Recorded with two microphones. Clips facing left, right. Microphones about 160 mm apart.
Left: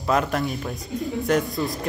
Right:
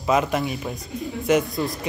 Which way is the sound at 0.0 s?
5° right (ahead or behind).